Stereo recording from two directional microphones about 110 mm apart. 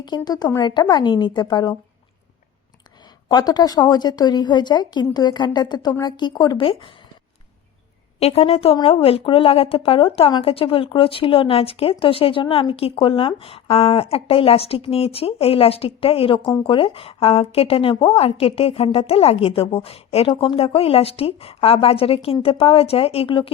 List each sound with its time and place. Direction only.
0.3 s a woman's voice: 40° left (ahead or behind)
3.2 s a woman's voice: 40° left (ahead or behind)
8.2 s a woman's voice: 65° left (ahead or behind)